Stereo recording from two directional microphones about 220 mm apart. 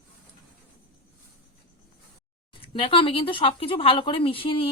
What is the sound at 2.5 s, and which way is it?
Speech, 25° left (ahead or behind).